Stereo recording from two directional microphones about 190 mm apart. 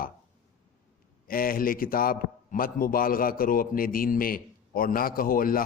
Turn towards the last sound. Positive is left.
turn(degrees=50)  # may be behind; listen again after turning